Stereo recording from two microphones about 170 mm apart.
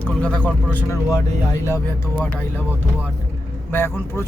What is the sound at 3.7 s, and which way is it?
Speech, 15° left (ahead or behind).